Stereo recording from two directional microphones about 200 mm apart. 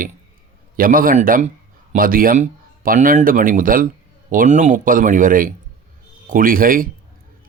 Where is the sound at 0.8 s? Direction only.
45° right (ahead or behind).